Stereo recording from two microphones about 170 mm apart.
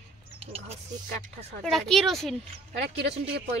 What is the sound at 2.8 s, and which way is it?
Speech, 90° right.